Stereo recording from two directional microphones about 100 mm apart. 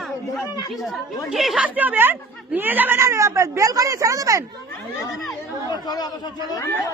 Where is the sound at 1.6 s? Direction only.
15° right (ahead or behind); by 4.4 s 35° right (ahead or behind).